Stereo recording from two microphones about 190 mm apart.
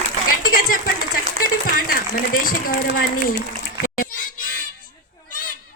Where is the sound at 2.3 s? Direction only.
50° left (ahead or behind).